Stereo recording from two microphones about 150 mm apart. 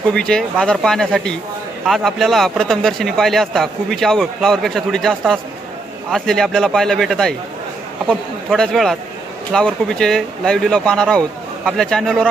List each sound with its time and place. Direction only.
0.1 s speech: 5° left (ahead or behind)